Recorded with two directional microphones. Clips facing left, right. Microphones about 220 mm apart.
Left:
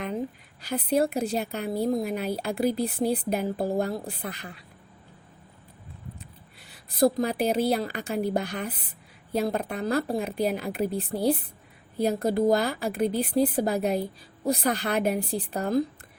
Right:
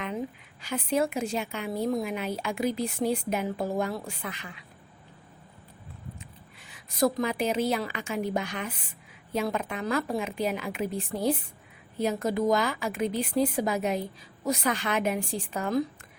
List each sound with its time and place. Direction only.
0.6 s speech: 35° left (ahead or behind)
6.1 s speech: 35° left (ahead or behind)